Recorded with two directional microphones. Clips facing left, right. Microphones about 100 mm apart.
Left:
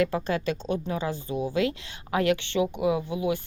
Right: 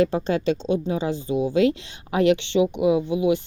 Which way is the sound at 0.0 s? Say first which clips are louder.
Right 5 dB; 25° right (ahead or behind).